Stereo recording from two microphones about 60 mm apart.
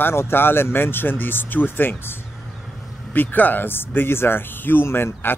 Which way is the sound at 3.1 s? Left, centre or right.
Left.